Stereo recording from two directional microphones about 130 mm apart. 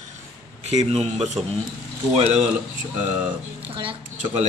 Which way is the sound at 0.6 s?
55° right (ahead or behind).